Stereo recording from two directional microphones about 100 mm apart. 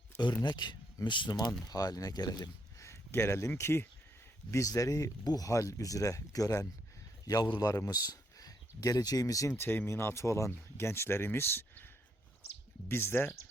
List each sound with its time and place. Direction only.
0.2 s speech: 50° left (ahead or behind)
2.8 s speech: 25° left (ahead or behind)
9.6 s speech: 20° left (ahead or behind)
12.9 s speech: 25° left (ahead or behind)